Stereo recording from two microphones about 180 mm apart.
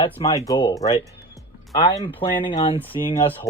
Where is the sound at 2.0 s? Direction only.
25° left (ahead or behind).